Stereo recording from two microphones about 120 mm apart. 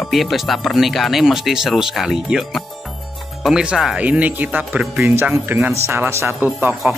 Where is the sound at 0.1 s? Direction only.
Centre (ahead or behind).